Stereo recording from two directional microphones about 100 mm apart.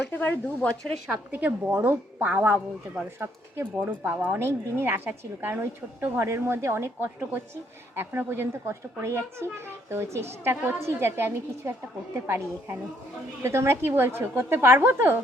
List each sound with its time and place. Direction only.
0.1 s speech: 15° left (ahead or behind)
1.3 s speech: 15° right (ahead or behind)